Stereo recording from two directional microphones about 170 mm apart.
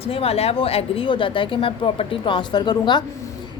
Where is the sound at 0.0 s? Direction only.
35° left (ahead or behind).